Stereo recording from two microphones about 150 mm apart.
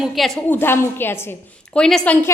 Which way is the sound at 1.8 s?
5° left (ahead or behind).